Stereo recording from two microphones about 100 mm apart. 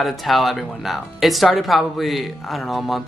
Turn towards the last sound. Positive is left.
turn(degrees=0)  # may be behind; listen again after turning